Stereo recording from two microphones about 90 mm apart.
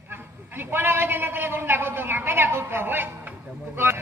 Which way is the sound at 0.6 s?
25° right (ahead or behind).